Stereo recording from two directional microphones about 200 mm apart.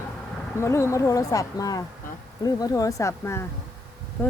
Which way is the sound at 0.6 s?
15° left (ahead or behind).